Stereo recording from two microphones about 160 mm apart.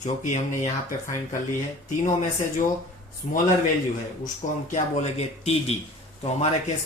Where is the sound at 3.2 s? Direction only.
40° left (ahead or behind).